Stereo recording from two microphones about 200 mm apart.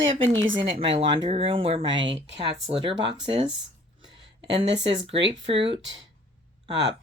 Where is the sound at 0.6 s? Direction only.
25° right (ahead or behind).